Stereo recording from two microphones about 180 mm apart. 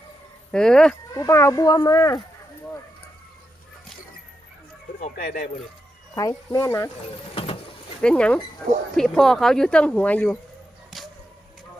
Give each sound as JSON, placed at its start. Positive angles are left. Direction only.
{"t": 0.5, "sound": "speech", "side_deg": 5}
{"t": 1.1, "sound": "speech", "side_deg": 15}
{"t": 4.9, "sound": "speech", "side_deg": 50}
{"t": 6.1, "sound": "speech", "side_deg": 20}
{"t": 7.3, "sound": "a sound", "side_deg": 30}
{"t": 8.0, "sound": "speech", "side_deg": 5}
{"t": 10.9, "sound": "music", "side_deg": 0}